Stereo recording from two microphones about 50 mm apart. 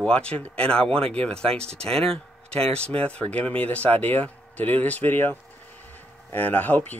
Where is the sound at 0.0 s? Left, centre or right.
Left.